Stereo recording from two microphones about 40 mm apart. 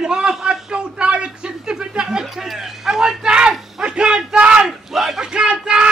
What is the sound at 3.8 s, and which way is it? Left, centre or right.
Speech, right.